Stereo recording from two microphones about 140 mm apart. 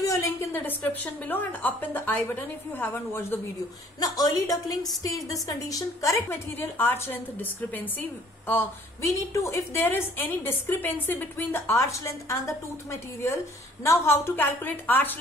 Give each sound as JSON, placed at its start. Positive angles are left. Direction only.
{"t": 0.0, "sound": "a woman's voice", "side_deg": 20}
{"t": 13.8, "sound": "a woman's voice", "side_deg": 20}